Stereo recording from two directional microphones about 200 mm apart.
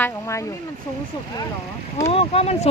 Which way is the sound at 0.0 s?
15° left (ahead or behind).